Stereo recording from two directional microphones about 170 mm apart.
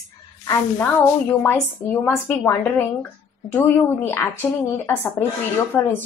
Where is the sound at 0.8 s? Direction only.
10° left (ahead or behind).